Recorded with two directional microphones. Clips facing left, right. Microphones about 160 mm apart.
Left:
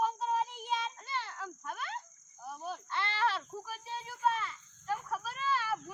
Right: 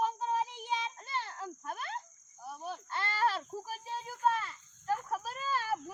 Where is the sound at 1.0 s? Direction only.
40° right (ahead or behind).